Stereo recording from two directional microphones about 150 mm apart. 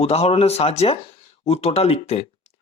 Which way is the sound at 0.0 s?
45° left (ahead or behind).